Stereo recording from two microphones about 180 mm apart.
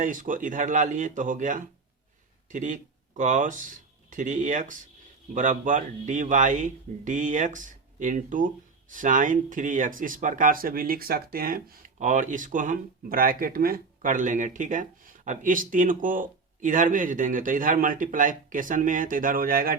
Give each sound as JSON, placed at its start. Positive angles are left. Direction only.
{"t": 0.0, "sound": "speech", "side_deg": -45}